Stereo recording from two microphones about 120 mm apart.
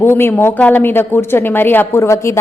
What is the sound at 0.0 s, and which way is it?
Speech, 20° left (ahead or behind).